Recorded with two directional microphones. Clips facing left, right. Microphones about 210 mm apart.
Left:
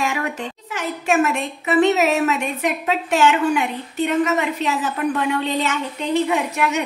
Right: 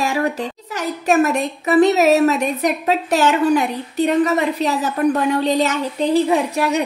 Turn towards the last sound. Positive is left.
turn(degrees=-35)  # may be behind; listen again after turning